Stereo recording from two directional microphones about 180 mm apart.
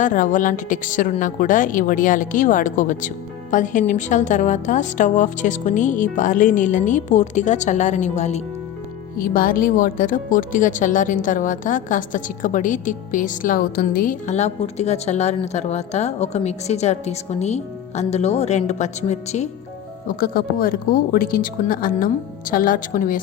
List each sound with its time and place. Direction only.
0.0 s speech: 45° left (ahead or behind)
9.1 s speech: 50° left (ahead or behind)
20.1 s speech: 55° left (ahead or behind)